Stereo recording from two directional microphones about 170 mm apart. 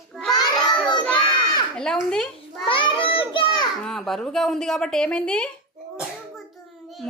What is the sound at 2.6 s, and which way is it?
Children playing, 30° left (ahead or behind).